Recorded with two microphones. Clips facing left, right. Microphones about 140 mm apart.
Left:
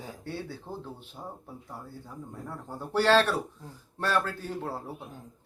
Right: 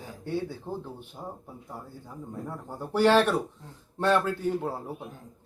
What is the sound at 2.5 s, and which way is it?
A man's voice, 15° right (ahead or behind).